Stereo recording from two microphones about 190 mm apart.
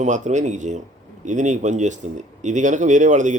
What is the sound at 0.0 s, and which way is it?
Speech, 40° right (ahead or behind).